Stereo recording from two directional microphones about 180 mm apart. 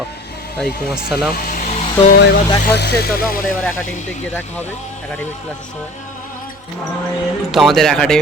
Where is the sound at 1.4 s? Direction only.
50° left (ahead or behind).